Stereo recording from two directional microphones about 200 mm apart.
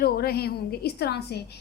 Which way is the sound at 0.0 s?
50° left (ahead or behind).